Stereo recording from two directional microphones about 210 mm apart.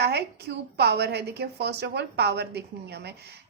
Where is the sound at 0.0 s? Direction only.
50° right (ahead or behind).